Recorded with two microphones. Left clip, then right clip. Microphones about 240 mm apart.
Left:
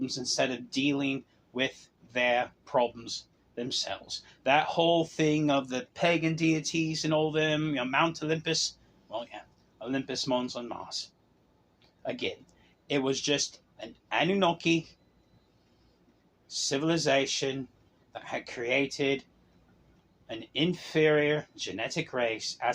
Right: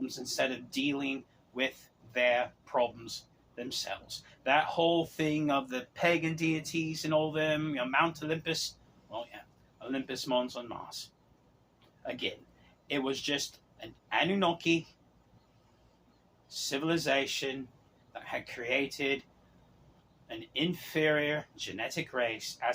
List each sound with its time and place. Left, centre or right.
0.0 s speech: left
12.0 s speech: left
16.5 s speech: left
20.2 s speech: left